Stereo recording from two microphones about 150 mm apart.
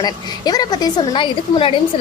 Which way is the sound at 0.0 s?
25° left (ahead or behind).